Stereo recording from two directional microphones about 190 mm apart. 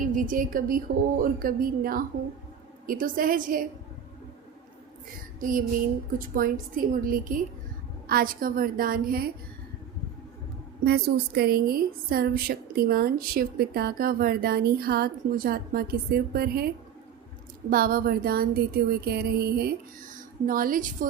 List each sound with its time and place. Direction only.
0.0 s a woman's voice: 45° right (ahead or behind)
5.4 s a sound: 45° right (ahead or behind)
6.1 s a woman's voice: 45° right (ahead or behind)
10.8 s a woman's voice: 60° right (ahead or behind)